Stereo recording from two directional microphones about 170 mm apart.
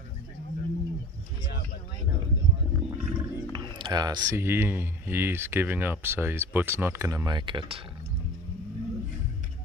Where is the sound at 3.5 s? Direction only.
25° right (ahead or behind).